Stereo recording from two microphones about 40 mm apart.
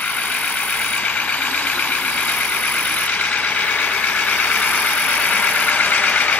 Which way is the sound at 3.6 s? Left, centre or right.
Left.